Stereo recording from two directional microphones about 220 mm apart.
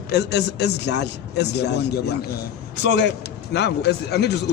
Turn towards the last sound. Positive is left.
turn(degrees=50)  # may be behind; listen again after turning